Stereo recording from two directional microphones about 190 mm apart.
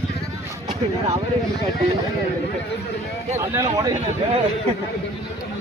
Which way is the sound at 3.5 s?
20° right (ahead or behind).